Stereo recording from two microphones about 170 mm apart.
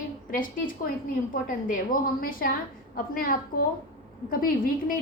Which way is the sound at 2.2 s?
55° left (ahead or behind).